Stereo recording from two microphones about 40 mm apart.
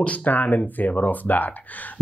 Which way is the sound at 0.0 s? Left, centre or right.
Left.